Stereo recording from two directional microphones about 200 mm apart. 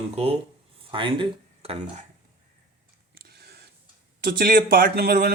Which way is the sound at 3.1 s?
50° right (ahead or behind).